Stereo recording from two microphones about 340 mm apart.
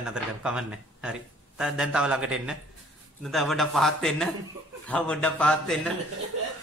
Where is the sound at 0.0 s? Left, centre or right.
Centre.